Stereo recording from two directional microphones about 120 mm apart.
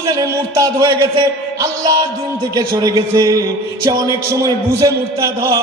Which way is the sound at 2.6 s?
30° right (ahead or behind).